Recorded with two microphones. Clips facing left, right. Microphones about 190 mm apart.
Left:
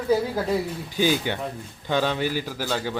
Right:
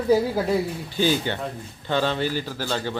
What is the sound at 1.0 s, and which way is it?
Speech, 10° left (ahead or behind).